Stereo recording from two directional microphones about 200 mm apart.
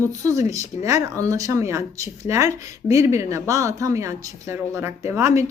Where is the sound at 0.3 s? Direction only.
15° right (ahead or behind).